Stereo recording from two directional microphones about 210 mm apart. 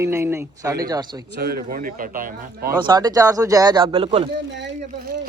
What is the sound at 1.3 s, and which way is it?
Speech, 45° right (ahead or behind).